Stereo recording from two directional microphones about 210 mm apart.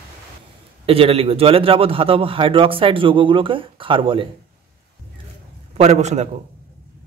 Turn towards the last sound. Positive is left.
turn(degrees=-35)  # may be behind; listen again after turning